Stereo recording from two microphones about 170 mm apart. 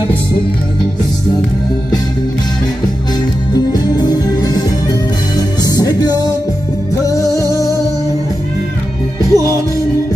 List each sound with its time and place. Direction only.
3.5 s music: 25° left (ahead or behind)
9.3 s music: 20° right (ahead or behind)